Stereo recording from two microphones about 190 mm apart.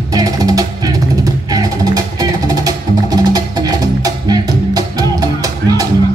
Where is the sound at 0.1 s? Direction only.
20° right (ahead or behind).